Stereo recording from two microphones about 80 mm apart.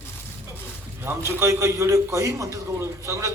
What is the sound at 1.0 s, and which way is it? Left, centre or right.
A man's voice, right.